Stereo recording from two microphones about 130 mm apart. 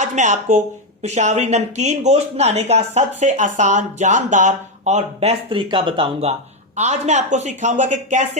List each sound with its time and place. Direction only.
0.0 s speech: 65° right (ahead or behind); by 6.3 s 50° right (ahead or behind)
6.7 s speech: 60° right (ahead or behind)